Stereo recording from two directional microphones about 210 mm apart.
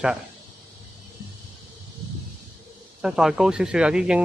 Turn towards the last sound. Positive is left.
turn(degrees=-5)  # may be behind; listen again after turning